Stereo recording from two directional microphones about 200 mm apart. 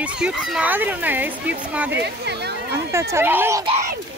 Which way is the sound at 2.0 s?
55° right (ahead or behind).